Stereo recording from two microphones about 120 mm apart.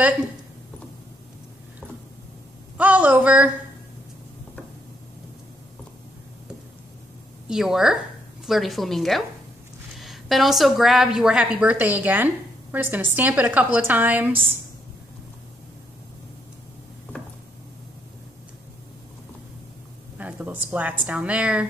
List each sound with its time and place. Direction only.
2.8 s a woman's voice: 10° right (ahead or behind)
7.4 s a woman's voice: 5° right (ahead or behind)
20.2 s a woman's voice: 10° right (ahead or behind)